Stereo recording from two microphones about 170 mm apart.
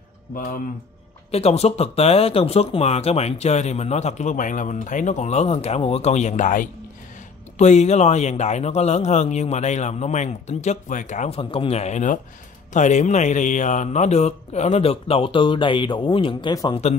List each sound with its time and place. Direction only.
0.3 s speech: 60° left (ahead or behind)
1.3 s speech: 35° left (ahead or behind)